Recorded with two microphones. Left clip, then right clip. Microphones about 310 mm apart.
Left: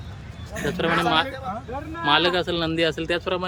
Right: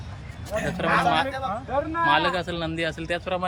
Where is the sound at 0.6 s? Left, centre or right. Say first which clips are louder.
Even; centre.